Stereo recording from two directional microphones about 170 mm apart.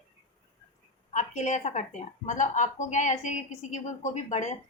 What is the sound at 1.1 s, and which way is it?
A woman's voice, 45° left (ahead or behind).